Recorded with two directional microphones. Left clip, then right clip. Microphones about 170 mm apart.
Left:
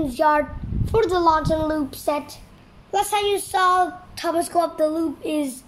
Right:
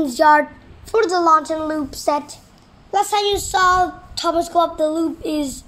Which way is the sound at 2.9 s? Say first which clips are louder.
Right 3 dB; 30° right (ahead or behind).